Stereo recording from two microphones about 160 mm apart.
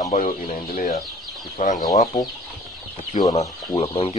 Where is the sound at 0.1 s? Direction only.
60° left (ahead or behind).